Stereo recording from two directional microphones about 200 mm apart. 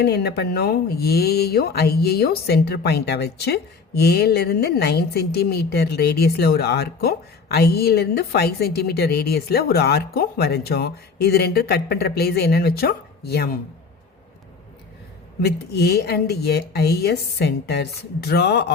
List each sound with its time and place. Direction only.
0.0 s speech: 55° left (ahead or behind)
15.4 s speech: 55° left (ahead or behind)